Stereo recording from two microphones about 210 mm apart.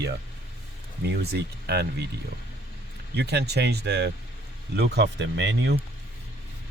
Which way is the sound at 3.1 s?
50° right (ahead or behind).